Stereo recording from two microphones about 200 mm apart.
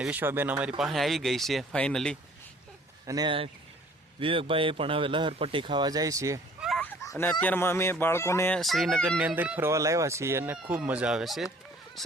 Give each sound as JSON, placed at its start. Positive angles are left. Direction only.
{"t": 0.0, "sound": "speech", "side_deg": -10}
{"t": 0.8, "sound": "fowl", "side_deg": 0}
{"t": 3.1, "sound": "speech", "side_deg": -20}
{"t": 6.6, "sound": "a sound", "side_deg": 0}
{"t": 7.0, "sound": "fowl", "side_deg": 15}
{"t": 12.0, "sound": "a sound", "side_deg": 0}